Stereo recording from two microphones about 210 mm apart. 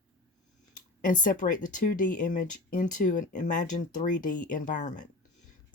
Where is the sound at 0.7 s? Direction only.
40° left (ahead or behind).